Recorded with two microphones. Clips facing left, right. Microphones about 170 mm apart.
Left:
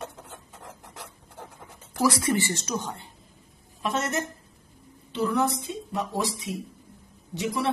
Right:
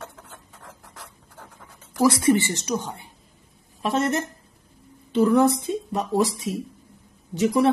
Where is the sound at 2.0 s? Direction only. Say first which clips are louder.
Right 5 dB; 25° right (ahead or behind).